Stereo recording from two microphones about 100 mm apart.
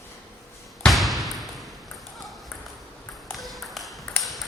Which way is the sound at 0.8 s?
Centre (ahead or behind).